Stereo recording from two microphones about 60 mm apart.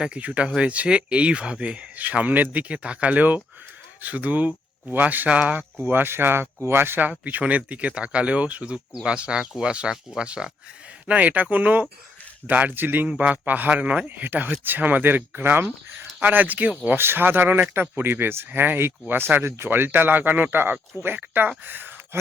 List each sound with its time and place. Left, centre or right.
0.0 s speech: centre
5.8 s speech: right
7.1 s speech: right
13.1 s speech: right
17.0 s speech: right
21.6 s a sound: right